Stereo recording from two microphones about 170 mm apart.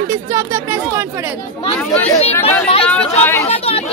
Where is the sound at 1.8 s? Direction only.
5° left (ahead or behind).